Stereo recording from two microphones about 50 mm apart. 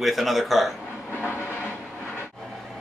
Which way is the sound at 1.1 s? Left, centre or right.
Left.